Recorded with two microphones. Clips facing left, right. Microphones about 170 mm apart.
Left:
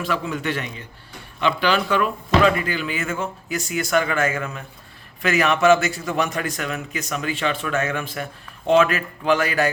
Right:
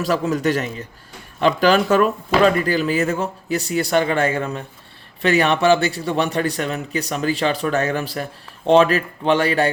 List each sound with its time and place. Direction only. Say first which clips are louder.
0.0 s a man's voice: right 6 dB; 40° right (ahead or behind)